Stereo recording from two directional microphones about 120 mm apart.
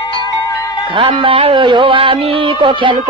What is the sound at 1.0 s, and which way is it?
Speech, 45° right (ahead or behind).